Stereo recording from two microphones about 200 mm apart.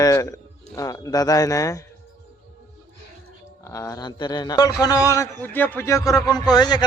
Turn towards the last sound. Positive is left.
turn(degrees=20)  # may be behind; listen again after turning